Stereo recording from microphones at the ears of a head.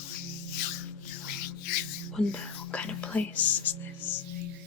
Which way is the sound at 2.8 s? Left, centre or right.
Left.